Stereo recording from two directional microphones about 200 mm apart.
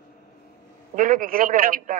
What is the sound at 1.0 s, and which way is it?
Speech, 45° right (ahead or behind).